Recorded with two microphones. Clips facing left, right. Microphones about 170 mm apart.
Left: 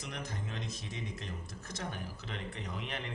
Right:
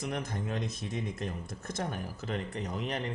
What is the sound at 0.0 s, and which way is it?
Speech, 50° right (ahead or behind).